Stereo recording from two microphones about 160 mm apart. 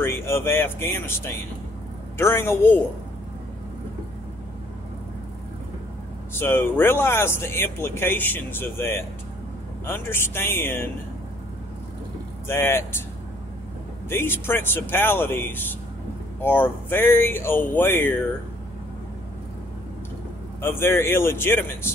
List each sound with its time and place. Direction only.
0.0 s speech: 15° left (ahead or behind)
6.3 s speech: 15° left (ahead or behind)
12.4 s speech: 15° left (ahead or behind)
14.0 s speech: 15° left (ahead or behind)
20.6 s speech: 15° left (ahead or behind)